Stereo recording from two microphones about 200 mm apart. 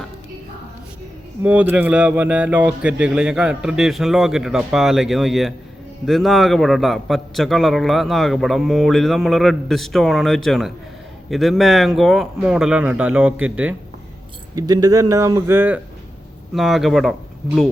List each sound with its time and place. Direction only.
1.4 s a man's voice: 10° right (ahead or behind)
14.5 s a man's voice: 20° right (ahead or behind); by 17.7 s centre (ahead or behind)